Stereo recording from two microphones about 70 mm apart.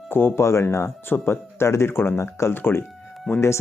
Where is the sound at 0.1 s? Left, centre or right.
Left.